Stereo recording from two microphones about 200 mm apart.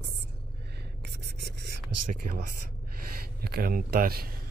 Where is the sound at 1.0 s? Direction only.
55° right (ahead or behind).